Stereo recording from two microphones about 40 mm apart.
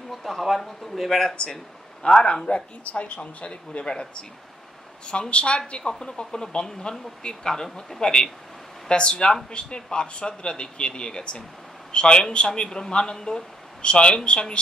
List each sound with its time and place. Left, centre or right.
0.4 s speech: centre
1.3 s speech: left
3.8 s speech: centre
12.6 s speech: centre